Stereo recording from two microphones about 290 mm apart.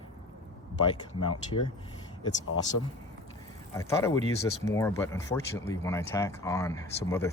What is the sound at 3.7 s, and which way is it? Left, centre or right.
Speech, centre.